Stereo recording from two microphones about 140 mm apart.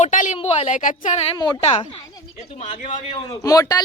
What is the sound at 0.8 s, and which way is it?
Speech, 65° left (ahead or behind).